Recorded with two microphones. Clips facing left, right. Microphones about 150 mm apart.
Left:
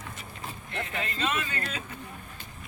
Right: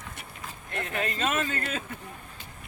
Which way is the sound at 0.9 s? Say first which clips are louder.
Right 3 dB; 50° right (ahead or behind).